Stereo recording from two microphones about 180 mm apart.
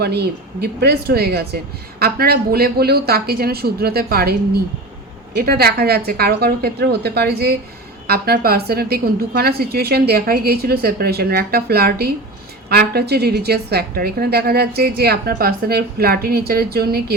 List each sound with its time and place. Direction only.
0.0 s a woman's voice: 65° right (ahead or behind)